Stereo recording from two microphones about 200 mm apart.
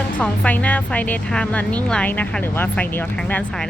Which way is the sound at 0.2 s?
5° left (ahead or behind).